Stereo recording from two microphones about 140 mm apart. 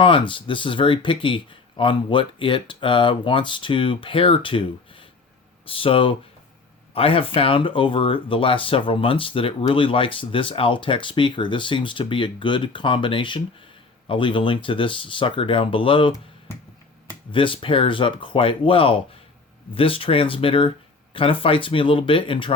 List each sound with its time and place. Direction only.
0.0 s speech: 35° left (ahead or behind)
17.3 s speech: 40° left (ahead or behind)